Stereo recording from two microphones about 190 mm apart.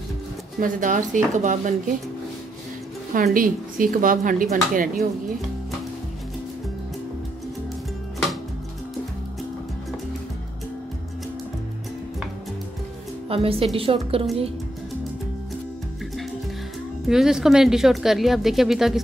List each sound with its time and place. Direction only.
0.6 s speech: 45° right (ahead or behind)
3.1 s speech: 45° right (ahead or behind)
13.3 s a woman's voice: 30° right (ahead or behind)
17.1 s a woman's voice: 5° right (ahead or behind)